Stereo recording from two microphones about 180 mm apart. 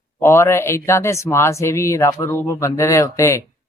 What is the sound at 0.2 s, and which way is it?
Speech, 15° left (ahead or behind).